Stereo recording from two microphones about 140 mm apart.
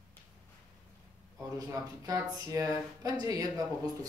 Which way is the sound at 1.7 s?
25° right (ahead or behind).